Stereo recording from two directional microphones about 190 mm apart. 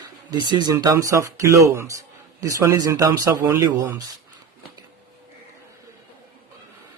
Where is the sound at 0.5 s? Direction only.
20° right (ahead or behind).